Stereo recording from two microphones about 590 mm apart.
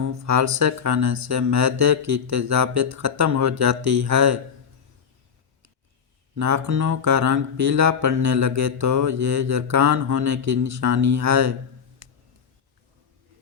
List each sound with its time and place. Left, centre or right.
0.0 s speech: right
6.3 s speech: right
12.0 s a sound: right